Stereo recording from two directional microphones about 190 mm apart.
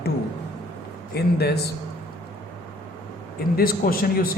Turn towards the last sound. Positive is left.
turn(degrees=50)  # may be behind; listen again after turning